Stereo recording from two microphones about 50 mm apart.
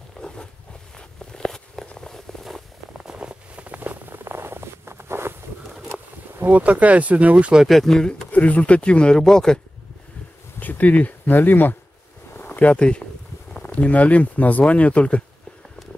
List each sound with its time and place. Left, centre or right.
0.2 s a sound: centre
0.9 s walk: centre
2.0 s a sound: centre
2.9 s patter: centre; by 4.2 s right
4.2 s a sound: right
6.5 s speech: right
7.6 s speech: centre
8.3 s speech: left; by 9.6 s centre
10.6 s speech: left